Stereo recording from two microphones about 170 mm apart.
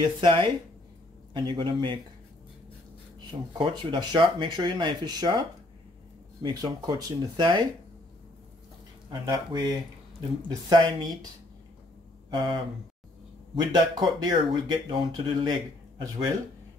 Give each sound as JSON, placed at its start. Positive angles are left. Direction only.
{"t": 0.2, "sound": "speech", "side_deg": -30}
{"t": 3.3, "sound": "speech", "side_deg": -30}
{"t": 9.1, "sound": "speech", "side_deg": -20}
{"t": 12.3, "sound": "speech", "side_deg": -30}